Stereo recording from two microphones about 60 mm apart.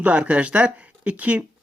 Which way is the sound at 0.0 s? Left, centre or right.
Right.